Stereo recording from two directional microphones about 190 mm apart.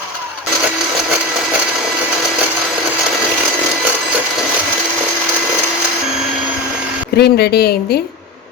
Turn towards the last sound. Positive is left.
turn(degrees=55)  # may be behind; listen again after turning